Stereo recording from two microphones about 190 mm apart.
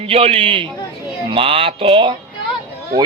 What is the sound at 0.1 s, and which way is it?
Music, 30° right (ahead or behind).